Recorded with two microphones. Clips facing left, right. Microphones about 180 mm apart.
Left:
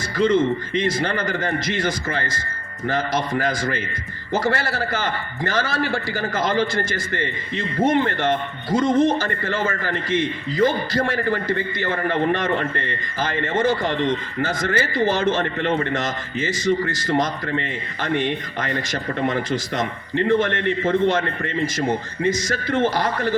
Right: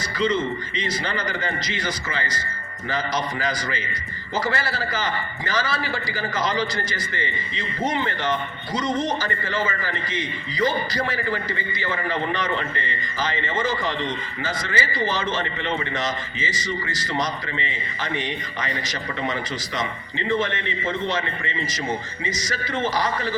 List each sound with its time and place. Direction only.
0.2 s a man's voice: 55° left (ahead or behind)